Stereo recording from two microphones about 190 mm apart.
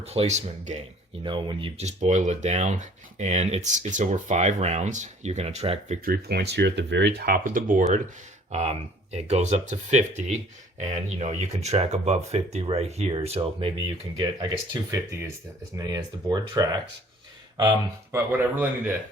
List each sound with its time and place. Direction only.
0.0 s speech: 35° right (ahead or behind)
1.2 s speech: 25° right (ahead or behind)
6.1 s speech: 55° right (ahead or behind); by 18.2 s 20° right (ahead or behind)
18.3 s speech: 10° right (ahead or behind)